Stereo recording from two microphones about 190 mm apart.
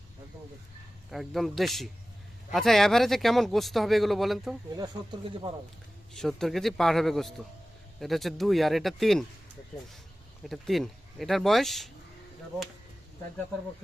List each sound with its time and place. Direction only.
1.1 s speech: centre (ahead or behind)
4.7 s speech: 20° right (ahead or behind)
6.1 s speech: centre (ahead or behind)
10.4 s speech: centre (ahead or behind)